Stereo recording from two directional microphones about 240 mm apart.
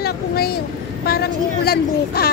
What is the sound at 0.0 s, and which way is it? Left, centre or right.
A woman's voice, left.